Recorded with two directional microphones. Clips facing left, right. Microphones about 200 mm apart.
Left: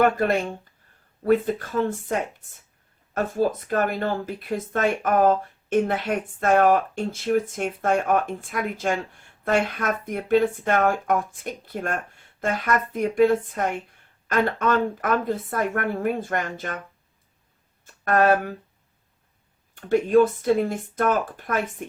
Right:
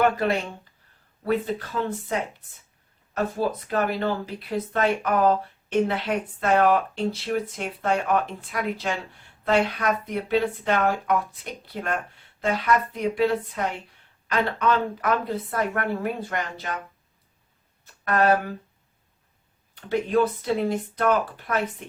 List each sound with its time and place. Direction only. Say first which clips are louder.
0.0 s speech: left 2 dB; 50° left (ahead or behind)
3.3 s speech: left 5 dB; 45° left (ahead or behind)
18.0 s speech: left 2 dB; 45° left (ahead or behind)
19.7 s speech: left 5 dB; 45° left (ahead or behind)